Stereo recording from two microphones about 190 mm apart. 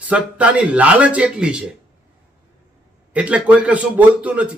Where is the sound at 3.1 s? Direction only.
5° right (ahead or behind).